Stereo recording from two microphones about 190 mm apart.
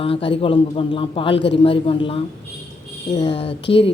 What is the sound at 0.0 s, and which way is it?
Speech, 30° left (ahead or behind).